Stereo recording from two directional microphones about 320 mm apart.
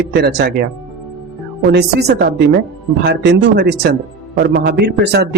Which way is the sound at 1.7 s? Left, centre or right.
Right.